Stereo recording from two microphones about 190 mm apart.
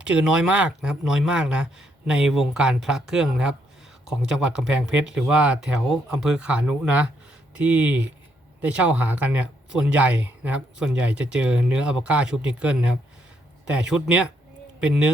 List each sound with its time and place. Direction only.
0.0 s speech: 5° right (ahead or behind)